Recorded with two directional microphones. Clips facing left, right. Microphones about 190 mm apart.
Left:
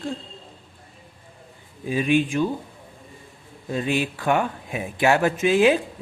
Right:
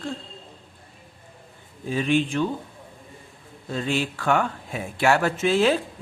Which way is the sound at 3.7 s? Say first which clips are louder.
Left 2 dB; 15° left (ahead or behind).